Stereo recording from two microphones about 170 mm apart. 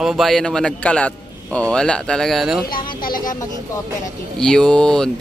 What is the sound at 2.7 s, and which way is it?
Speech, 55° left (ahead or behind).